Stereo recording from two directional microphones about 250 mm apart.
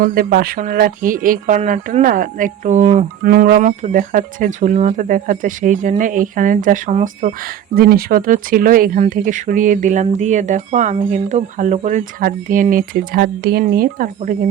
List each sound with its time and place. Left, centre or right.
0.0 s speech: right